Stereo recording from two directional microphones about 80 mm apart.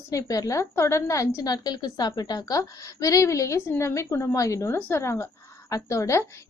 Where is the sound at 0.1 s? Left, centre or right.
Left.